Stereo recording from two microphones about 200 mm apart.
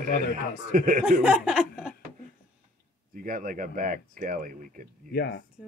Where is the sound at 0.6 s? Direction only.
45° right (ahead or behind).